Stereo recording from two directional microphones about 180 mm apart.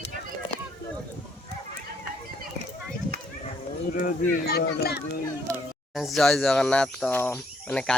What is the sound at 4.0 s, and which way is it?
Speech, 55° left (ahead or behind).